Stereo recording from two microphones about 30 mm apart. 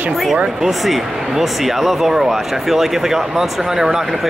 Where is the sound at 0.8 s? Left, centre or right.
Centre.